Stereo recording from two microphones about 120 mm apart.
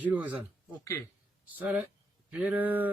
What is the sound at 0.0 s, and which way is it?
Speech, 15° right (ahead or behind).